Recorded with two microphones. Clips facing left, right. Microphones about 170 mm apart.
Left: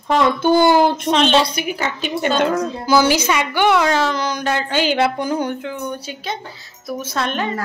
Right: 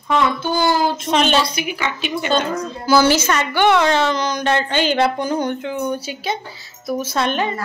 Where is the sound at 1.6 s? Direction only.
45° left (ahead or behind).